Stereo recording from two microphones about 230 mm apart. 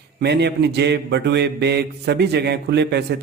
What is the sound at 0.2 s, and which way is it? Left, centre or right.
Mantra, right.